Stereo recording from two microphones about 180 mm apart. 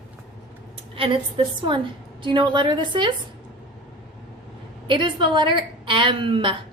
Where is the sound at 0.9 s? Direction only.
30° right (ahead or behind).